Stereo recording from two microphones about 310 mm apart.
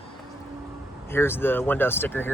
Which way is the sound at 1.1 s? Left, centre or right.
Centre.